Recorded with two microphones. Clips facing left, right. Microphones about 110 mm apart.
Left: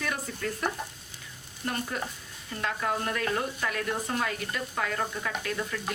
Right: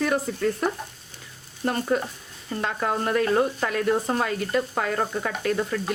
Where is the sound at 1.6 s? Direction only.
35° right (ahead or behind).